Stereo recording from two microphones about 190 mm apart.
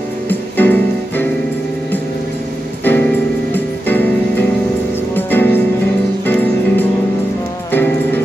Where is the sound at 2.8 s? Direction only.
10° left (ahead or behind).